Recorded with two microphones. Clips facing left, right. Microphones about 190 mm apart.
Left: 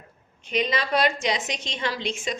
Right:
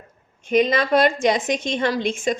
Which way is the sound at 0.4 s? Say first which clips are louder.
Right 8 dB; 50° right (ahead or behind).